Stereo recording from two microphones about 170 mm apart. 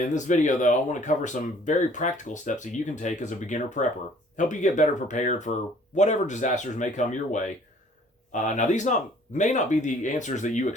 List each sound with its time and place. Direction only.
0.0 s speech: 45° left (ahead or behind)